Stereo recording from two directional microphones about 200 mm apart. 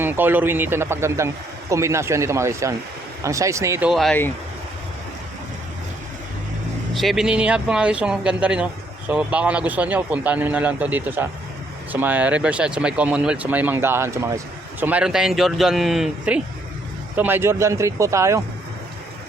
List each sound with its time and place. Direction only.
0.0 s speech: 10° right (ahead or behind)
3.8 s speech: centre (ahead or behind)
6.9 s speech: centre (ahead or behind)